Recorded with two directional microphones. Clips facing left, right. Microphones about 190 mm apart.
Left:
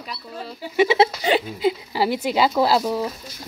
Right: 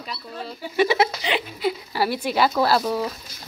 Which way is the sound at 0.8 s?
25° left (ahead or behind).